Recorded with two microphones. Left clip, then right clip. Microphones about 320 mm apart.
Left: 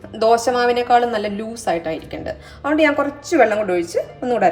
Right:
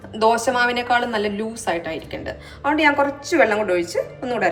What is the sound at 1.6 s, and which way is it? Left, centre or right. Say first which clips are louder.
Speech: left 4 dB; left.